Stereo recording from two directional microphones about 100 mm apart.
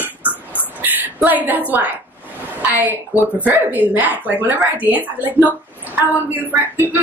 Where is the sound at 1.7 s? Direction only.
15° right (ahead or behind).